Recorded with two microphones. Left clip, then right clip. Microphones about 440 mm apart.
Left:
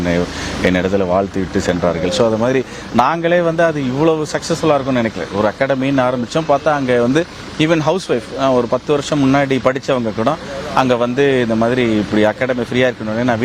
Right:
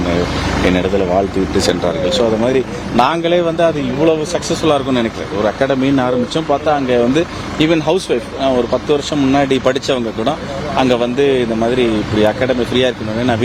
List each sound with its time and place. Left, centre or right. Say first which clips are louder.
0.6 s a sound: even; left
2.0 s speech: right 2 dB; left
4.0 s a man's voice: right 1 dB; left
4.6 s a man's voice: even; left